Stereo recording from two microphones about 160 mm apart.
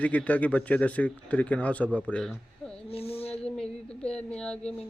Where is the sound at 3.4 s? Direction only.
5° left (ahead or behind).